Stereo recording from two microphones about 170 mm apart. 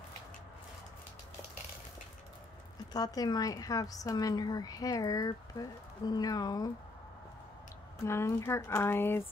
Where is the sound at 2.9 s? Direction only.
25° left (ahead or behind).